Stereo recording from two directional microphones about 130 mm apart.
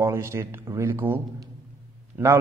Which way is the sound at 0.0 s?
20° right (ahead or behind).